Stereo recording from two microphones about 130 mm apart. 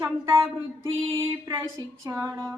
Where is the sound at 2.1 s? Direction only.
25° right (ahead or behind).